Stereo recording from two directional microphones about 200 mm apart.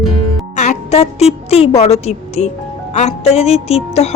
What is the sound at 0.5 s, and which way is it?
A woman's voice, 35° left (ahead or behind).